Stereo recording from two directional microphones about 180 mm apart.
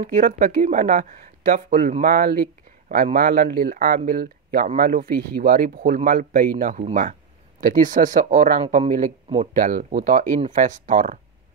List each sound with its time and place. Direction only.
0.0 s speech: 45° right (ahead or behind)